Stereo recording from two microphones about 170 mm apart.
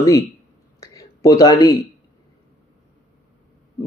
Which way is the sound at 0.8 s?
20° left (ahead or behind).